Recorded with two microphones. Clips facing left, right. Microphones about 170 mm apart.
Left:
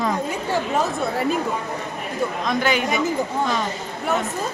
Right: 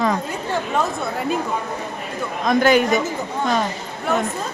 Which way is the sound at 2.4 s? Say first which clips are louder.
Right 8 dB; 45° right (ahead or behind).